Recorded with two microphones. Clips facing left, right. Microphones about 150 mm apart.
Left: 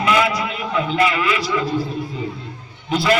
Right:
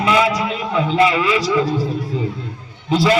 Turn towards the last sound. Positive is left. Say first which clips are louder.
# right 3 dB
turn(degrees=-30)  # may be behind; listen again after turning